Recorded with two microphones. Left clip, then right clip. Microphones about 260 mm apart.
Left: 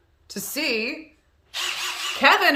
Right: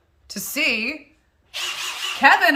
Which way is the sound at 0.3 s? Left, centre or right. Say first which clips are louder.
Right 3 dB; centre.